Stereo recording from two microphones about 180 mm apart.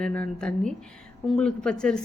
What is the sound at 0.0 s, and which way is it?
A woman's voice, 5° left (ahead or behind).